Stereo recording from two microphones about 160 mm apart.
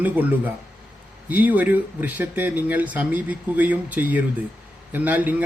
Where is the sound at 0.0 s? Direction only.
10° right (ahead or behind).